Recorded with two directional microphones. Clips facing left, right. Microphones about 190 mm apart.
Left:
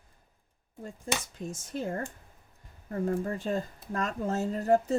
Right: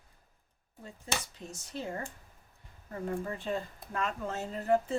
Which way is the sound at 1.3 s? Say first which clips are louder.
Left 5 dB; 50° left (ahead or behind).